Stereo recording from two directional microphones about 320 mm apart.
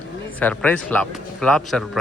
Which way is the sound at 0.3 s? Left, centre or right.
Centre.